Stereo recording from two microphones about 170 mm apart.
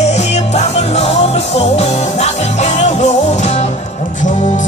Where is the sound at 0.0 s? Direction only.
40° left (ahead or behind).